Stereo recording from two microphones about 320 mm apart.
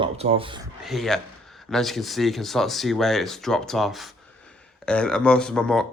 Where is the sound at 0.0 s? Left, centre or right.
Centre.